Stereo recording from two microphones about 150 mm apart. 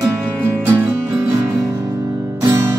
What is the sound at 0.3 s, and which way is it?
Music, 15° right (ahead or behind).